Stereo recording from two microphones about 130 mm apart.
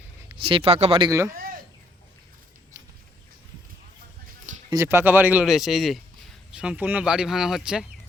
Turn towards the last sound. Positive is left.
turn(degrees=-5)  # may be behind; listen again after turning